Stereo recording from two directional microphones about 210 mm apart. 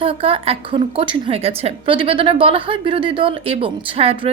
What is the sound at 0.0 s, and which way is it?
A woman's voice, 25° right (ahead or behind).